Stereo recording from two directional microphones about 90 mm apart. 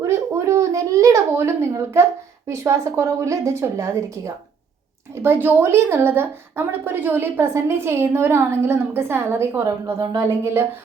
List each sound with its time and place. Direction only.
0.0 s a sound: 30° right (ahead or behind)
2.5 s a woman's voice: 35° right (ahead or behind)
10.2 s a woman's voice: 30° right (ahead or behind)